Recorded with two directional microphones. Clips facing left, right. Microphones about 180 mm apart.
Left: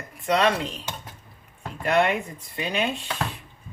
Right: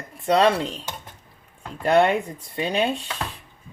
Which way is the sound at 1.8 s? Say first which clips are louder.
Right 4 dB; 35° right (ahead or behind).